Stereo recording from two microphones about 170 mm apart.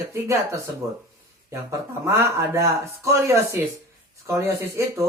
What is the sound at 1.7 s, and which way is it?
Speech, 15° right (ahead or behind).